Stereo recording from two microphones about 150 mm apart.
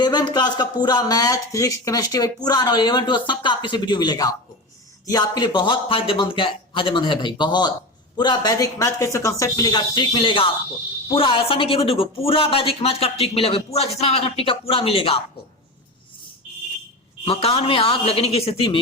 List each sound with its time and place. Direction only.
0.0 s a man's voice: 30° left (ahead or behind)
17.2 s a man's voice: 40° left (ahead or behind)